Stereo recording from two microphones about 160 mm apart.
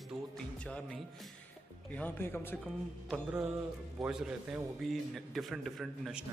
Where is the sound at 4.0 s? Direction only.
5° right (ahead or behind).